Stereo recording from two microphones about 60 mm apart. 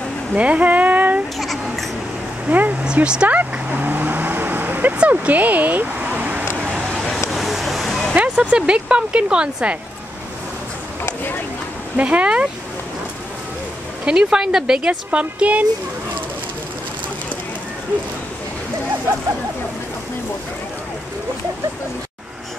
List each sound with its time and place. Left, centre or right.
0.3 s a sound: right
1.4 s a sound: centre
2.4 s speech: right
2.8 s speech: centre
3.3 s vehicle: right
4.9 s speech: right
7.3 s a sound: centre
8.2 s speech: centre
12.0 s a woman's voice: right
14.0 s speech: centre
14.9 s a woman's voice: right